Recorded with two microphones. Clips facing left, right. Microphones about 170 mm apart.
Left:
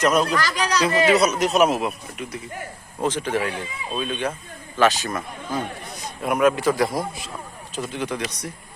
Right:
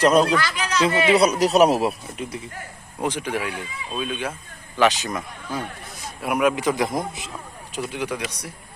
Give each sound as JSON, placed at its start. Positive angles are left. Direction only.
{"t": 0.0, "sound": "a man's voice", "side_deg": -30}
{"t": 0.3, "sound": "speech", "side_deg": 40}
{"t": 1.1, "sound": "a man's voice", "side_deg": -30}
{"t": 3.0, "sound": "a man's voice", "side_deg": -10}
{"t": 4.8, "sound": "a man's voice", "side_deg": -20}